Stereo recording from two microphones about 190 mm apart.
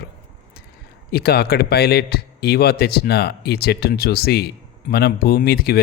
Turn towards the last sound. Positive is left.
turn(degrees=55)  # may be behind; listen again after turning